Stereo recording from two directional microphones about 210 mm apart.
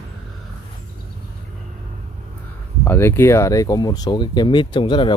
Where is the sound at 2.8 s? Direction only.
10° left (ahead or behind).